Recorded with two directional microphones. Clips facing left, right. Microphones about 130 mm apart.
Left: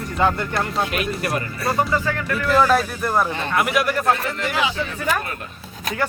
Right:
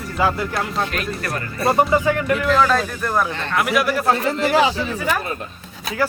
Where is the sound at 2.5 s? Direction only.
10° left (ahead or behind).